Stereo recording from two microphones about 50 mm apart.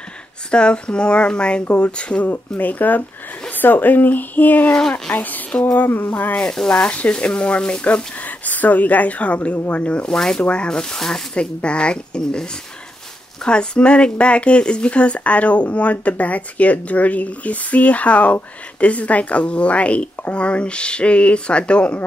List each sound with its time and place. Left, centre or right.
0.5 s speech: centre
2.3 s speech: left
4.7 s speech: centre
5.1 s speech: left
6.5 s speech: centre
6.8 s speech: left
10.1 s speech: centre
11.3 s speech: left